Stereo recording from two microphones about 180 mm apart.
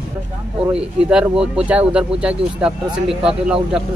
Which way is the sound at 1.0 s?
5° right (ahead or behind).